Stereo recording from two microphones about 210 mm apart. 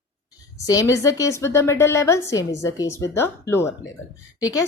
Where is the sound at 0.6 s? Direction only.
15° left (ahead or behind).